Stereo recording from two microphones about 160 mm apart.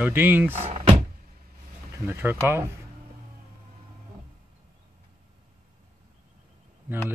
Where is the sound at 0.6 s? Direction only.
40° right (ahead or behind).